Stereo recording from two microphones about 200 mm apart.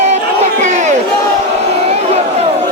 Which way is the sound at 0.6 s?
35° right (ahead or behind).